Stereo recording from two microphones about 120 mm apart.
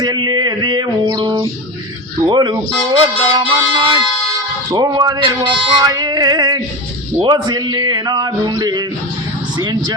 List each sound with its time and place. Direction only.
0.0 s male singing: 35° right (ahead or behind)
9.6 s speech: 35° right (ahead or behind)